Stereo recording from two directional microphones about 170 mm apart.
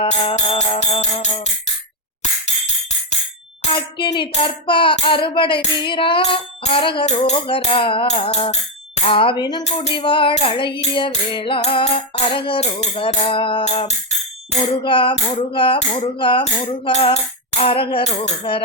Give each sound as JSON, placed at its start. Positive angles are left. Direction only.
{"t": 0.0, "sound": "music", "side_deg": 30}
{"t": 3.6, "sound": "speech", "side_deg": 30}
{"t": 4.3, "sound": "music", "side_deg": 30}
{"t": 9.6, "sound": "music", "side_deg": 40}
{"t": 9.9, "sound": "music", "side_deg": 30}